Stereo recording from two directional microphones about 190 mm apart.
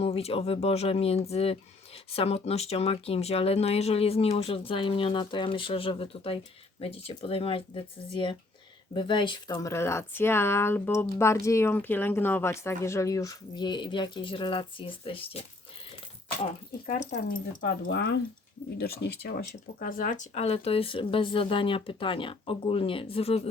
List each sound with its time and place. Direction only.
0.0 s speech: 30° left (ahead or behind)
16.8 s speech: 40° left (ahead or behind)
17.9 s speech: 65° left (ahead or behind); by 23.4 s 30° left (ahead or behind)